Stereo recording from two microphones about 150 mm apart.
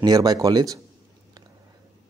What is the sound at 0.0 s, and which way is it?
Speech, 25° right (ahead or behind).